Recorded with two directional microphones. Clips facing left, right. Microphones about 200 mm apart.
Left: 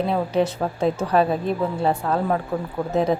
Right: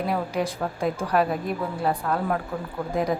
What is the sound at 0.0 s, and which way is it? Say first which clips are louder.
A woman's voice: left 5 dB; 25° left (ahead or behind).